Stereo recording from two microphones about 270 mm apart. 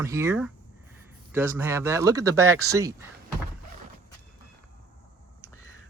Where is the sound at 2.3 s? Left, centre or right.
Right.